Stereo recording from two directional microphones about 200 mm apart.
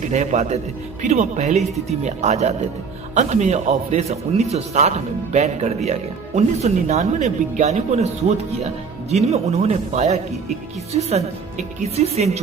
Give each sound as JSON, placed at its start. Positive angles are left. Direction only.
{"t": 0.1, "sound": "a man's voice", "side_deg": -35}